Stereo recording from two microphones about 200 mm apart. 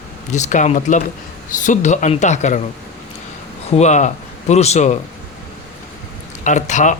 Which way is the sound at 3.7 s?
35° left (ahead or behind).